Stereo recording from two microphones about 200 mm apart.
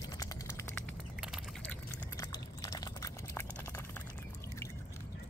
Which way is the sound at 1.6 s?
10° left (ahead or behind).